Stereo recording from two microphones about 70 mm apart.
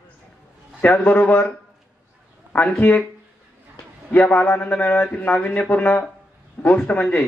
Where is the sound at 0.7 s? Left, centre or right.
Left.